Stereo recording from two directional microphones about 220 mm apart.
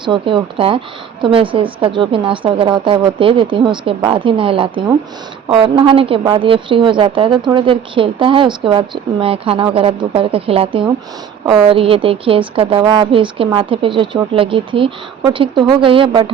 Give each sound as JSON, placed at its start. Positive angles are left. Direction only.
{"t": 0.0, "sound": "a woman's voice", "side_deg": -20}